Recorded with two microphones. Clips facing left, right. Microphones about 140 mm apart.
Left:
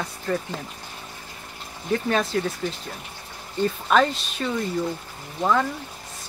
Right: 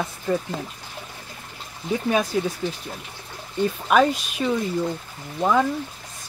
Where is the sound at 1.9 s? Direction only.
10° right (ahead or behind).